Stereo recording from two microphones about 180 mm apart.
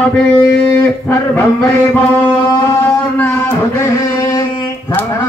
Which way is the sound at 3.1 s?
15° left (ahead or behind).